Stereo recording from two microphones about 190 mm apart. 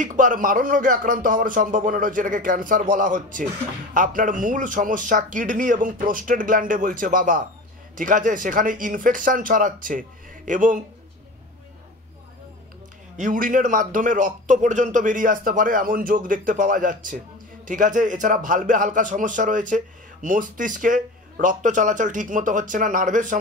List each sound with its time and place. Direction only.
0.0 s a man's voice: 45° right (ahead or behind)
13.2 s a man's voice: 45° right (ahead or behind)